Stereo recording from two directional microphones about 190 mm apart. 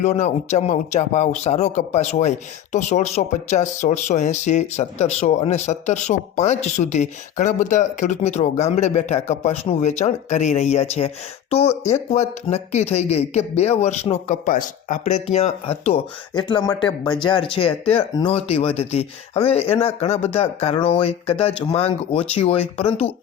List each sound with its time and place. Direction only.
0.0 s speech: 35° left (ahead or behind)
12.1 s speech: 35° left (ahead or behind)